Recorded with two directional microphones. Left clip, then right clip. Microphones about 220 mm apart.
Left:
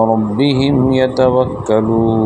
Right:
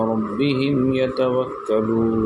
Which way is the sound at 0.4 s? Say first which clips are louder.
Left 5 dB; 35° left (ahead or behind).